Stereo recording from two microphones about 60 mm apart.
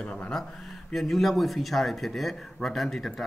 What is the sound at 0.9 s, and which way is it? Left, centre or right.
Speech, centre.